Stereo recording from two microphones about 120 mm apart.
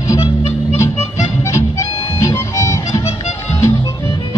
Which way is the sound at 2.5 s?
25° left (ahead or behind).